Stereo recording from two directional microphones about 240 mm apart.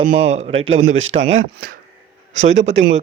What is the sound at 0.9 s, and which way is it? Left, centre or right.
Speech, right.